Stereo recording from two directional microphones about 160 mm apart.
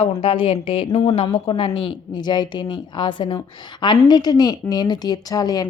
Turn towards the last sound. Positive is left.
turn(degrees=25)  # may be behind; listen again after turning